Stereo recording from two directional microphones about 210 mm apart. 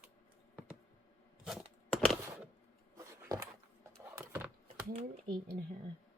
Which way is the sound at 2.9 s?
15° right (ahead or behind).